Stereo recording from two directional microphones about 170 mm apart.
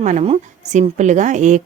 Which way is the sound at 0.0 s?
45° right (ahead or behind).